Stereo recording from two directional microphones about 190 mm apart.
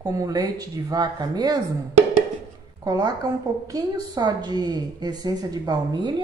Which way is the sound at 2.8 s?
20° right (ahead or behind).